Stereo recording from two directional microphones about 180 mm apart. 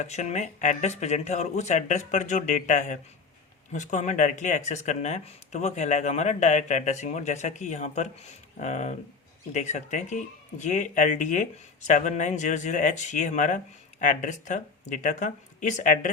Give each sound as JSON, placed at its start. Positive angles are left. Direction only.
{"t": 0.0, "sound": "speech", "side_deg": 40}